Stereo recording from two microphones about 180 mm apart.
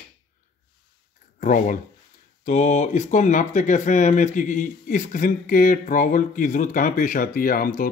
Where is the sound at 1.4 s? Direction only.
45° left (ahead or behind).